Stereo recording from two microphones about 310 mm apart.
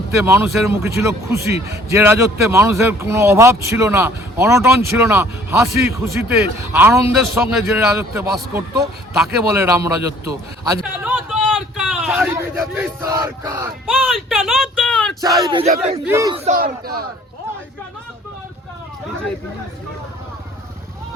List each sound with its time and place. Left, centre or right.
0.3 s a man's voice: centre
15.2 s speech: centre; by 17.0 s right